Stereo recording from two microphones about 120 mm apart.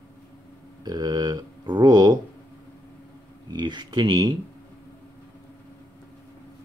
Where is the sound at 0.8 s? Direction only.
35° right (ahead or behind).